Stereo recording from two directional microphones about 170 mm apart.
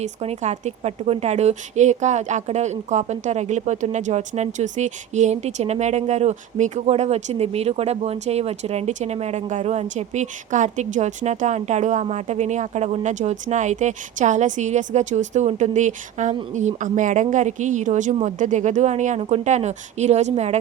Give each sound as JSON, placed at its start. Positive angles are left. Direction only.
{"t": 0.0, "sound": "a woman's voice", "side_deg": -40}